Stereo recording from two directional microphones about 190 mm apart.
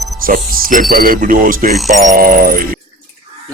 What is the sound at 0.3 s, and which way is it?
Speech, 45° right (ahead or behind).